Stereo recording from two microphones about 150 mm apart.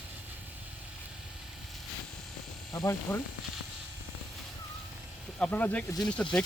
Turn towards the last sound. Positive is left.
turn(degrees=5)  # may be behind; listen again after turning